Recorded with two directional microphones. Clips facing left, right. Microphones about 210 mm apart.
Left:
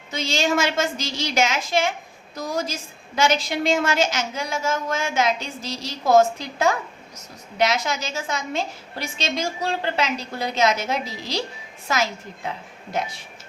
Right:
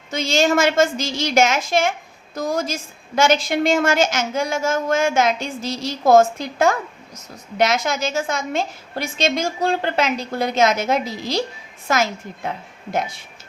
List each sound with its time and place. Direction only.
0.1 s a woman's voice: 45° right (ahead or behind)